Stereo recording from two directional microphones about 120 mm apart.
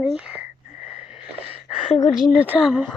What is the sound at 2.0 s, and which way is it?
Speech, 5° right (ahead or behind).